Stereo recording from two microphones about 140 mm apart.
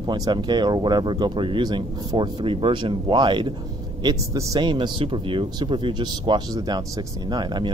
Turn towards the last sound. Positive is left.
turn(degrees=-35)  # may be behind; listen again after turning